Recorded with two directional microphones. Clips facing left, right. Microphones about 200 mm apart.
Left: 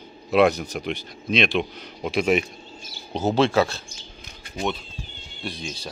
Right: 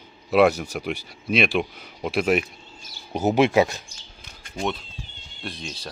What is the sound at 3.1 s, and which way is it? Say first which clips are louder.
Speech: right 1 dB; 15° right (ahead or behind).